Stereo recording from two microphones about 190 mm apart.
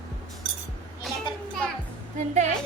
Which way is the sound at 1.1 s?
Centre (ahead or behind).